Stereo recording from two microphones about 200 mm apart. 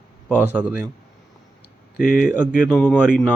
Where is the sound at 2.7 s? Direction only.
10° left (ahead or behind).